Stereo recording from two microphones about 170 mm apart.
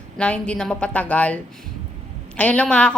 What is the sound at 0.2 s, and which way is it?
A man's voice, 5° left (ahead or behind).